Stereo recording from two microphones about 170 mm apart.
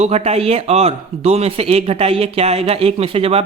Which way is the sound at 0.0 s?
40° right (ahead or behind).